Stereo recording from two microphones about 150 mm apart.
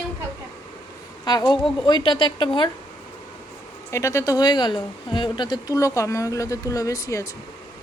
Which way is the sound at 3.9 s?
20° left (ahead or behind).